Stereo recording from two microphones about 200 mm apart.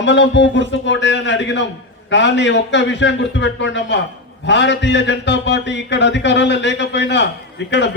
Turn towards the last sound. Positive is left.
turn(degrees=60)  # may be behind; listen again after turning